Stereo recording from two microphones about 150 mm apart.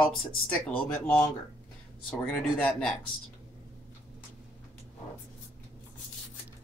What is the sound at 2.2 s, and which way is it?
Speech, 5° left (ahead or behind).